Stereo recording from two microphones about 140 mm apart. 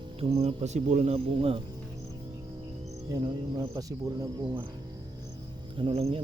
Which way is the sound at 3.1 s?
25° right (ahead or behind).